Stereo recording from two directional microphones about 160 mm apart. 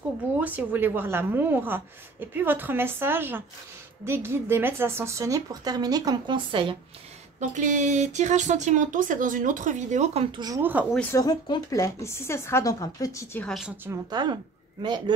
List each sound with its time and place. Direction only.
0.4 s a woman's voice: 10° right (ahead or behind); by 6.8 s 35° right (ahead or behind)
7.3 s speech: 50° right (ahead or behind)
10.3 s a woman's voice: 25° right (ahead or behind)
10.6 s a woman's voice: 10° right (ahead or behind)
11.1 s speech: 25° left (ahead or behind)
13.4 s a woman's voice: centre (ahead or behind)
14.1 s speech: 30° right (ahead or behind)